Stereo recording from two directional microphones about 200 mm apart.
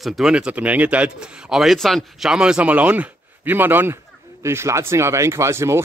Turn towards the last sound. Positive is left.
turn(degrees=-15)  # may be behind; listen again after turning